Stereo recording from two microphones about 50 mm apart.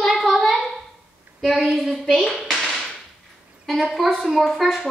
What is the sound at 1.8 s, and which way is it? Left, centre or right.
Speech, centre.